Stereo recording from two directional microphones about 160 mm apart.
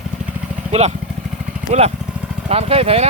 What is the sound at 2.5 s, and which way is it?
Speech, 40° right (ahead or behind).